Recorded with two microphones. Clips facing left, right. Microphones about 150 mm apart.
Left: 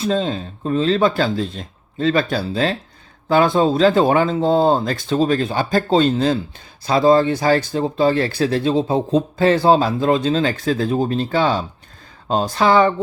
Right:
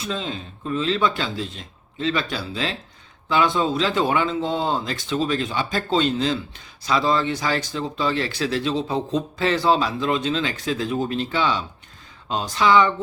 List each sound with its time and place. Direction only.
0.0 s speech: 35° left (ahead or behind)